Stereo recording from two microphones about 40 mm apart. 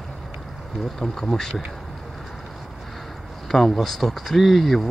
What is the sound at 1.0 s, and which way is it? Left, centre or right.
Speech, left.